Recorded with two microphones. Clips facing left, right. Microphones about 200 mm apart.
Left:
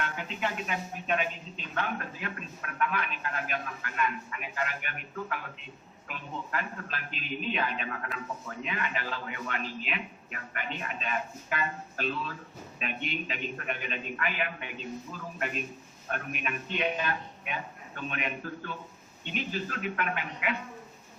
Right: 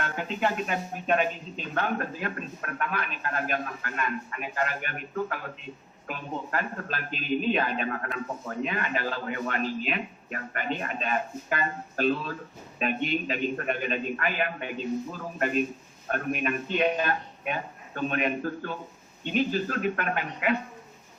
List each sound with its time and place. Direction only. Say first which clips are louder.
0.0 s a man's voice: right 5 dB; 40° right (ahead or behind)